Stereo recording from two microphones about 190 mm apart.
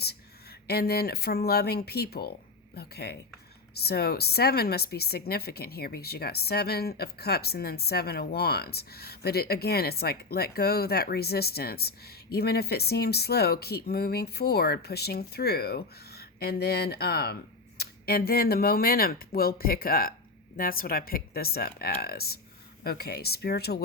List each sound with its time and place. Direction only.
0.7 s a woman's voice: 55° left (ahead or behind)